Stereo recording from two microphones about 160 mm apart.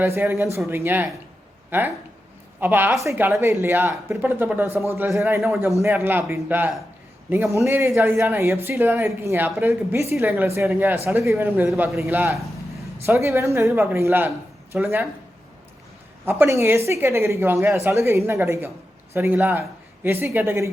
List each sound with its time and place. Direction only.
0.0 s a woman's voice: 15° right (ahead or behind)
16.4 s a woman's voice: 15° right (ahead or behind)